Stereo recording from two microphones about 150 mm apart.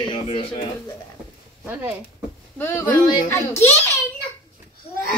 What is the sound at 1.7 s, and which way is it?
Speech, 15° right (ahead or behind).